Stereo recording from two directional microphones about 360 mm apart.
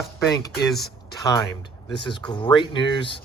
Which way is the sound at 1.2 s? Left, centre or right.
Centre.